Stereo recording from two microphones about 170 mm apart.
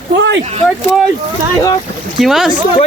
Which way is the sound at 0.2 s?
90° right.